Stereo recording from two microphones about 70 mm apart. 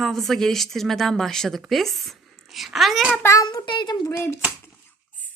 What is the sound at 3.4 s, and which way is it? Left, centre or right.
Speech, left.